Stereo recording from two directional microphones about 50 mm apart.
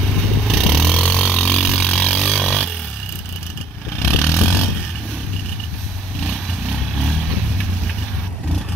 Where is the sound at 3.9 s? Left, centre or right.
Left.